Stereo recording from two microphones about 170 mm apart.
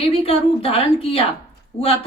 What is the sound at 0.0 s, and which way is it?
A woman's voice, 35° left (ahead or behind).